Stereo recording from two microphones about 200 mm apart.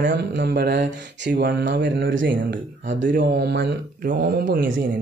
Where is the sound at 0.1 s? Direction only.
65° right (ahead or behind).